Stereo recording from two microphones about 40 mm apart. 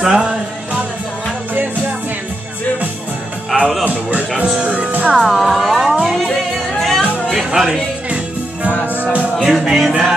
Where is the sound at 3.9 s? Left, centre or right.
Right.